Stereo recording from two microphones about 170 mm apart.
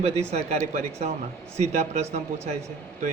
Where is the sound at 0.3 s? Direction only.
40° right (ahead or behind).